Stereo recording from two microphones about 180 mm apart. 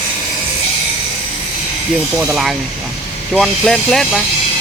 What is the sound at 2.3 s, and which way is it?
Speech, centre (ahead or behind).